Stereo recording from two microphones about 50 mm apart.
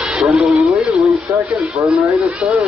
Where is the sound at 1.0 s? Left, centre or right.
Right.